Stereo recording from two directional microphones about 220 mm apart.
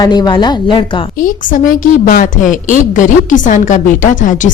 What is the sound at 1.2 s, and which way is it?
Speech, 35° left (ahead or behind).